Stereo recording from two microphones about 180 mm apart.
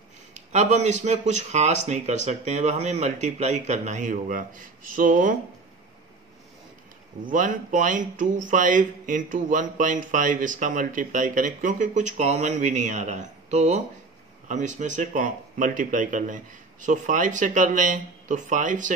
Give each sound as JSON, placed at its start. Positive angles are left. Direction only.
{"t": 0.3, "sound": "speech", "side_deg": -40}
{"t": 7.2, "sound": "speech", "side_deg": -45}